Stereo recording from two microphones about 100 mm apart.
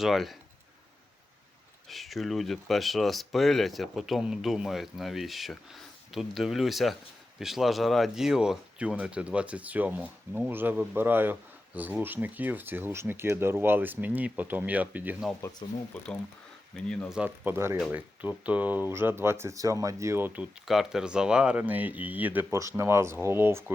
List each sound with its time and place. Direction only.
0.0 s speech: centre (ahead or behind)
1.9 s speech: centre (ahead or behind); by 15.1 s 15° right (ahead or behind)
15.6 s speech: 50° left (ahead or behind)
16.7 s speech: 10° left (ahead or behind)
17.2 s speech: 20° right (ahead or behind)
20.7 s speech: 5° right (ahead or behind); by 23.7 s 25° right (ahead or behind)